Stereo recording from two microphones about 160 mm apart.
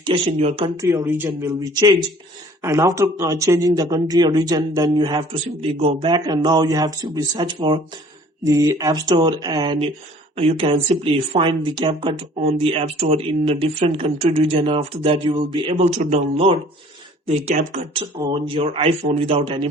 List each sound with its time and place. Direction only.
0.3 s speech: 35° right (ahead or behind)
0.8 s speech: 20° right (ahead or behind)
1.7 s speech: 25° right (ahead or behind)
8.4 s speech: 20° right (ahead or behind); by 17.7 s 45° right (ahead or behind)
18.3 s speech: 35° right (ahead or behind)